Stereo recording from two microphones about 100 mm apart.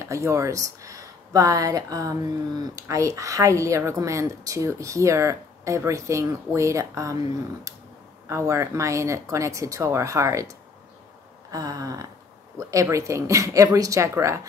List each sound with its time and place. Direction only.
0.0 s speech: 30° right (ahead or behind)
8.3 s speech: 30° right (ahead or behind)
11.5 s speech: 35° right (ahead or behind)